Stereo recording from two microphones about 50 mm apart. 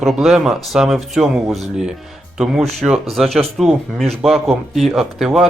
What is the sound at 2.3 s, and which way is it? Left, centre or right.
Speech, centre.